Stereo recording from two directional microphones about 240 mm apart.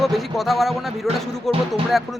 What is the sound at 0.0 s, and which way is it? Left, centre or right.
Speech, centre.